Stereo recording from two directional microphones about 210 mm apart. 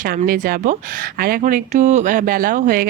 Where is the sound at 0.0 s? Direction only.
40° right (ahead or behind).